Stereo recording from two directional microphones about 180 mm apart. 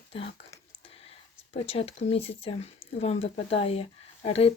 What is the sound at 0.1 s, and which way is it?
Speech, 30° left (ahead or behind).